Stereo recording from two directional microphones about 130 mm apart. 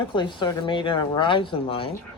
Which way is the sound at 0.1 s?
40° left (ahead or behind).